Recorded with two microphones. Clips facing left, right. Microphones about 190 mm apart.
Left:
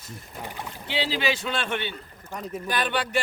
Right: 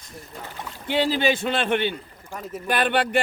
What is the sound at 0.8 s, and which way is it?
Speech, 50° right (ahead or behind).